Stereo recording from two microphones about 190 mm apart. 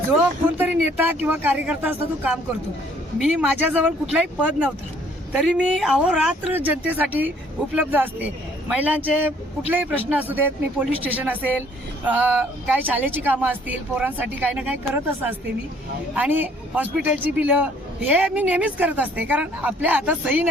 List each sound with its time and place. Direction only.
0.4 s a man's voice: 10° right (ahead or behind)